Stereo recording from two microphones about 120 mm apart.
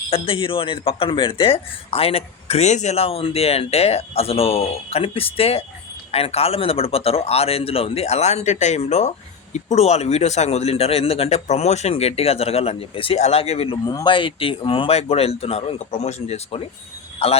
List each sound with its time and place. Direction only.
0.1 s speech: 50° left (ahead or behind)
13.8 s speech: 30° left (ahead or behind)
14.1 s speech: 45° left (ahead or behind); by 16.6 s 60° left (ahead or behind)